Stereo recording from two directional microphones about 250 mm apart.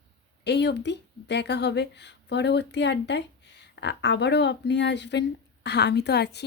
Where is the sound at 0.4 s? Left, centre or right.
Left.